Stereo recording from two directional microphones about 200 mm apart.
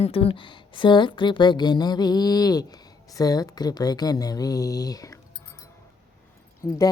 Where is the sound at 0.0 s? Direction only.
30° left (ahead or behind).